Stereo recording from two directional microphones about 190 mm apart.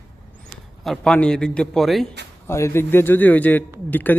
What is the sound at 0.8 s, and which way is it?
A man's voice, centre (ahead or behind).